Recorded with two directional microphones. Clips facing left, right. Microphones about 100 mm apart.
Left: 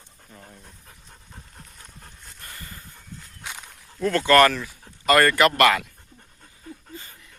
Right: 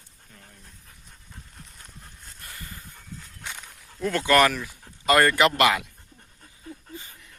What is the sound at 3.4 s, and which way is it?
Walk, 10° left (ahead or behind).